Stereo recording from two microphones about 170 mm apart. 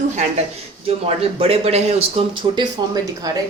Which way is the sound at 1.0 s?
35° right (ahead or behind).